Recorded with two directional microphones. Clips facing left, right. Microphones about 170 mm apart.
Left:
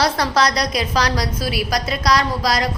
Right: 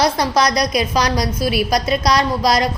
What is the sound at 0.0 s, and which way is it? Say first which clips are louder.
A woman's voice: right 2 dB; 15° right (ahead or behind).